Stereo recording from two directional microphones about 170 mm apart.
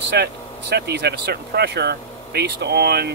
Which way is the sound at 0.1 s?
75° right (ahead or behind).